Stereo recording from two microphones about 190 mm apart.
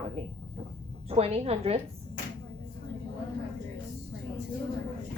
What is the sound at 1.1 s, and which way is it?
Speech, 30° right (ahead or behind).